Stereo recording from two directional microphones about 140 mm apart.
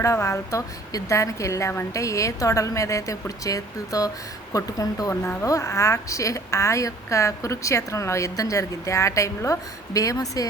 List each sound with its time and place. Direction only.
0.0 s a woman's voice: 20° left (ahead or behind)
5.2 s a woman's voice: 10° left (ahead or behind)